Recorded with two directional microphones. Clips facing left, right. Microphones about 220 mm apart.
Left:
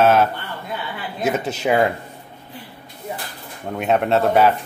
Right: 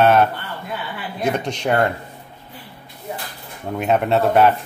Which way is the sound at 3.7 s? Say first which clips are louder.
Even; centre (ahead or behind).